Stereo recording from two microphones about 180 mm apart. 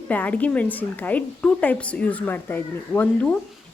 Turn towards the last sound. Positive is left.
turn(degrees=5)  # may be behind; listen again after turning